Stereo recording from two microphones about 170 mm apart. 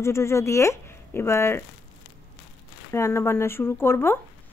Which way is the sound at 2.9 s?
15° left (ahead or behind).